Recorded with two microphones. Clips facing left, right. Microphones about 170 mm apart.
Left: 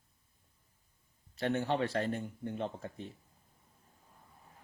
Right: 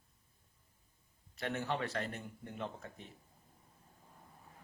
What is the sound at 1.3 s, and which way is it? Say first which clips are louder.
Speech: left 6 dB; 30° left (ahead or behind).